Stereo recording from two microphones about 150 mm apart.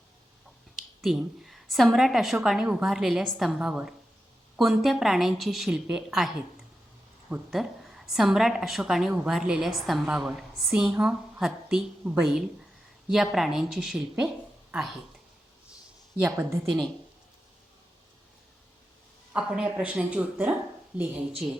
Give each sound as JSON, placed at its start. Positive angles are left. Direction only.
{"t": 1.0, "sound": "a woman's voice", "side_deg": 0}
{"t": 16.2, "sound": "a woman's voice", "side_deg": -20}
{"t": 19.3, "sound": "speech", "side_deg": -5}